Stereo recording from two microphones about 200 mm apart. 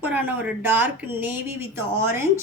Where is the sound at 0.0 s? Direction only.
10° right (ahead or behind).